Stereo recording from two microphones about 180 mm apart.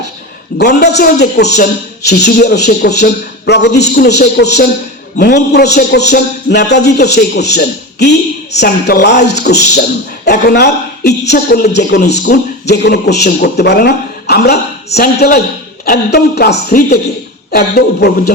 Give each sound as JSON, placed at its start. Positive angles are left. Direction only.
{"t": 0.6, "sound": "a man's voice", "side_deg": 65}
{"t": 17.5, "sound": "a man's voice", "side_deg": 60}